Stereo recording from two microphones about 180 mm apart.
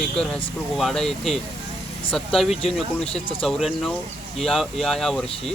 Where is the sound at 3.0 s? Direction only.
35° left (ahead or behind).